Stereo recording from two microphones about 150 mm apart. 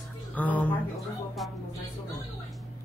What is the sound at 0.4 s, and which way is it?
Speech, 10° left (ahead or behind).